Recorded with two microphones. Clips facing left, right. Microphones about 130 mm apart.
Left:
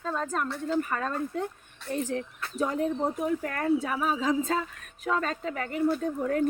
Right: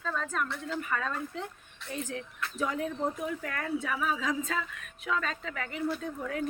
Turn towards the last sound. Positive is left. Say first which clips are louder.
# left 7 dB
turn(degrees=45)  # may be behind; listen again after turning